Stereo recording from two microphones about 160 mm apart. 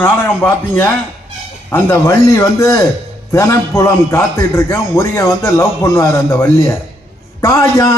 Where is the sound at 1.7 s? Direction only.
15° left (ahead or behind).